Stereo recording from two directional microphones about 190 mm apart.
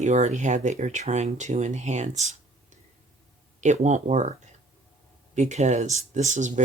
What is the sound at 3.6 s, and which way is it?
Speech, 40° right (ahead or behind).